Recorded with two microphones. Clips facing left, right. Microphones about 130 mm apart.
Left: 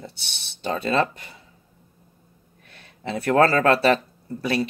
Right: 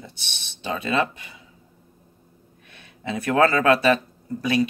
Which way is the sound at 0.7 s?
35° left (ahead or behind).